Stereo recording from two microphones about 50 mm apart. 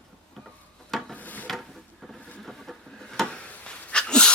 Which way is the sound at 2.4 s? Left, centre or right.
Centre.